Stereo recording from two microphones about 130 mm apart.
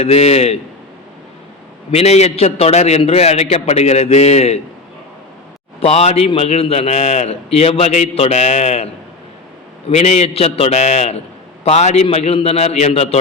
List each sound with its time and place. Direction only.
0.0 s a man's voice: 55° left (ahead or behind)
1.9 s a man's voice: 55° left (ahead or behind)
5.8 s a man's voice: 50° left (ahead or behind)
9.9 s a man's voice: 55° left (ahead or behind)